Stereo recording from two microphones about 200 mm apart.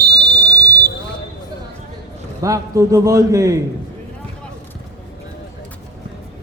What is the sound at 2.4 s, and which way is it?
A man's voice, 15° right (ahead or behind).